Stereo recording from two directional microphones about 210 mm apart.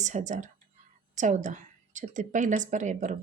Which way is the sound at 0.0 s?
35° right (ahead or behind).